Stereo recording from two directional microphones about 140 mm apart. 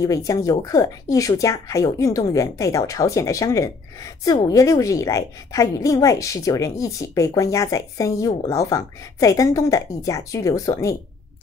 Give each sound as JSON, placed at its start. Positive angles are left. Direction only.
{"t": 0.0, "sound": "a woman's voice", "side_deg": 25}